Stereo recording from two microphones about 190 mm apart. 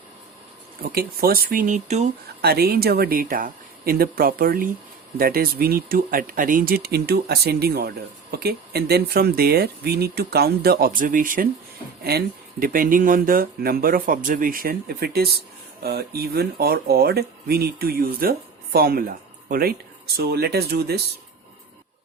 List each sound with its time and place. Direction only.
0.8 s speech: 50° right (ahead or behind)
2.4 s speech: 55° right (ahead or behind)